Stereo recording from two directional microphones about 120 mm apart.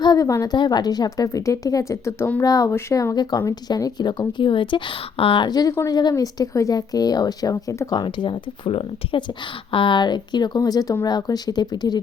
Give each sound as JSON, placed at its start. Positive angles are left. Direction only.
{"t": 0.0, "sound": "a woman's voice", "side_deg": 30}
{"t": 5.5, "sound": "speech", "side_deg": 30}